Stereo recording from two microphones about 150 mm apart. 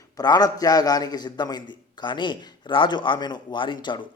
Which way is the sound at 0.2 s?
25° left (ahead or behind).